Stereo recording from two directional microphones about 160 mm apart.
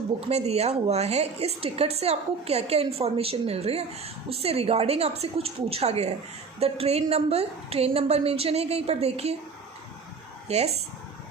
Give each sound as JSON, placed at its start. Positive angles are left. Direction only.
{"t": 0.3, "sound": "a woman's voice", "side_deg": -40}
{"t": 10.5, "sound": "a woman's voice", "side_deg": -40}